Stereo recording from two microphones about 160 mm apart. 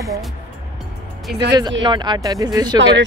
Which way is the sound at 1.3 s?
90° right.